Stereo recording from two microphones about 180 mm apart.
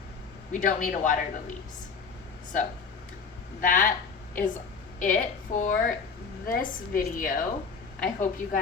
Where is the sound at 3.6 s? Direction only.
50° left (ahead or behind).